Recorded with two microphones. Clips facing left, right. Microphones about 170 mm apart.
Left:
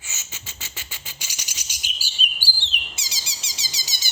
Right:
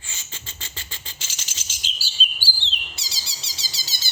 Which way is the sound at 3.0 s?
20° left (ahead or behind).